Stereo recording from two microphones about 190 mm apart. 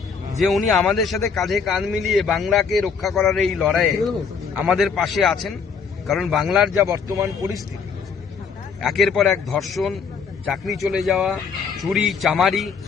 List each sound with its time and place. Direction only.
0.3 s a man's voice: centre (ahead or behind)
6.7 s speech: 15° right (ahead or behind)
8.8 s a man's voice: centre (ahead or behind)